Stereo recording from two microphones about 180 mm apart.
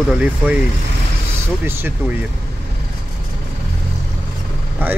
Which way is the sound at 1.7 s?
15° right (ahead or behind).